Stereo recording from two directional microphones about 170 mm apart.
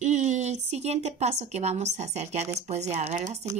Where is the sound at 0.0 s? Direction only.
45° right (ahead or behind).